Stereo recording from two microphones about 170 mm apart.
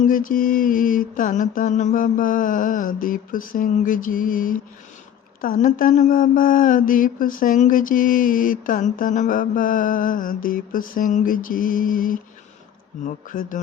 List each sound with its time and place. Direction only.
0.0 s mantra: 55° left (ahead or behind)